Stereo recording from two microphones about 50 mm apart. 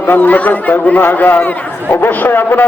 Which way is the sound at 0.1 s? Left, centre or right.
Left.